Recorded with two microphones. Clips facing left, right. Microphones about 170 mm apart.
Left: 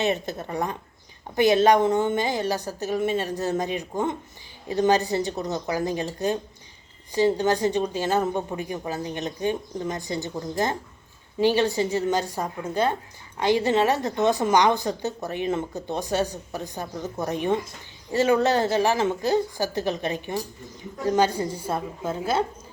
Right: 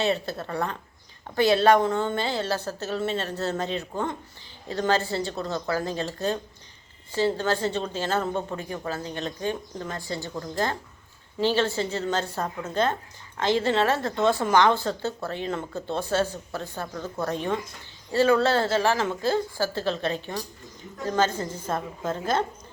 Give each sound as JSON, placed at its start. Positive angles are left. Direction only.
{"t": 0.0, "sound": "a woman's voice", "side_deg": 20}